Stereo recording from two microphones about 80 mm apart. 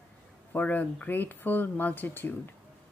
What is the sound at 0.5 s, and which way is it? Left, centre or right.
A woman's voice, left.